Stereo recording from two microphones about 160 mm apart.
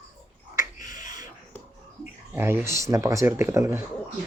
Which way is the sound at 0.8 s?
55° left (ahead or behind).